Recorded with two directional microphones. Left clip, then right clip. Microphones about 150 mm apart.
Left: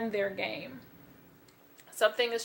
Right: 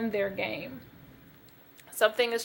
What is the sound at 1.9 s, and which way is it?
Speech, 45° right (ahead or behind).